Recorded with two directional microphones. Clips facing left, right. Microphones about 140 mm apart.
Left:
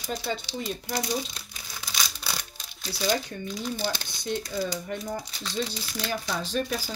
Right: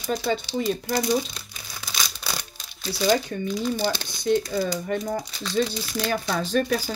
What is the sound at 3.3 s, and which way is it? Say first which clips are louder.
Speech: right 7 dB; 90° right.